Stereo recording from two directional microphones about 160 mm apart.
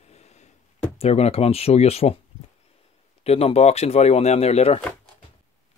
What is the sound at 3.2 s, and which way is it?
Speech, 40° left (ahead or behind).